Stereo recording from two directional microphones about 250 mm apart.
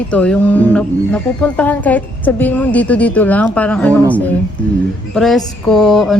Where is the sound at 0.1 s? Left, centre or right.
Centre.